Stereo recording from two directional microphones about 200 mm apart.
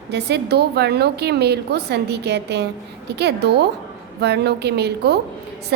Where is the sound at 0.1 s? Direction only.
55° right (ahead or behind).